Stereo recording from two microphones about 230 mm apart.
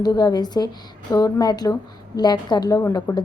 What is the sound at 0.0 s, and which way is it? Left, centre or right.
A woman's voice, centre.